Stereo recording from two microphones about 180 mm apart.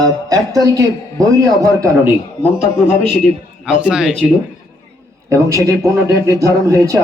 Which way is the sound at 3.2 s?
5° right (ahead or behind).